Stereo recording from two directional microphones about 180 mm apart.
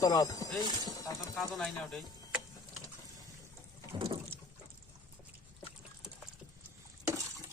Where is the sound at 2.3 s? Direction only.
5° right (ahead or behind).